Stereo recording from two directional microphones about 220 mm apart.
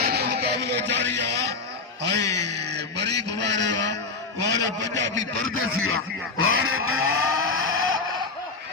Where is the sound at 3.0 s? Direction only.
50° right (ahead or behind).